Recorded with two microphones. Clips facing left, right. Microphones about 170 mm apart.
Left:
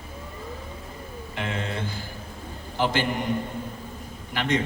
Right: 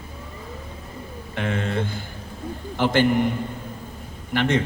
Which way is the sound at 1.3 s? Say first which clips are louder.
Right 5 dB; 55° right (ahead or behind).